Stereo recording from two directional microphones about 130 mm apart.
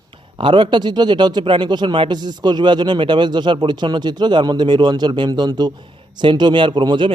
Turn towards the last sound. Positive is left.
turn(degrees=-35)  # may be behind; listen again after turning